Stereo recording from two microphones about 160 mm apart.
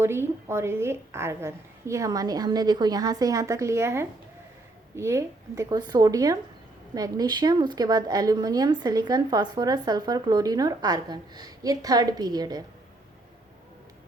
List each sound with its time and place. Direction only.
0.0 s a woman's voice: 15° right (ahead or behind)